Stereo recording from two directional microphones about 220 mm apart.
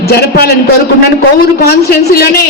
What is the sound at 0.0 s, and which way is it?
Speech, 45° left (ahead or behind).